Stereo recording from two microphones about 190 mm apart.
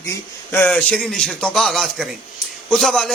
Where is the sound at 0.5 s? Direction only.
5° left (ahead or behind).